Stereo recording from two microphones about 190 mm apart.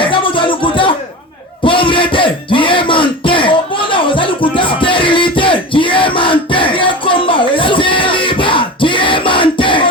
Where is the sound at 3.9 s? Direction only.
25° left (ahead or behind).